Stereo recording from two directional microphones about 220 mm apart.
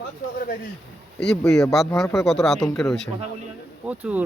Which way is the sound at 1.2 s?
Centre (ahead or behind).